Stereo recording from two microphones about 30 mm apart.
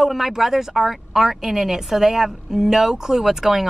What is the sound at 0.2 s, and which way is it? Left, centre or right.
Speech, centre.